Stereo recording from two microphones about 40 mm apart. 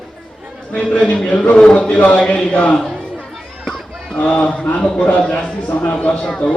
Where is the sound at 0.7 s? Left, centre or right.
Left.